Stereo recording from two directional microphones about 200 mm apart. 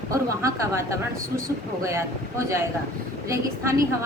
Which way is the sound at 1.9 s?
15° right (ahead or behind).